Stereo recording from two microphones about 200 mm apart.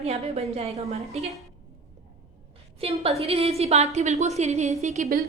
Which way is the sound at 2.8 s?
30° right (ahead or behind).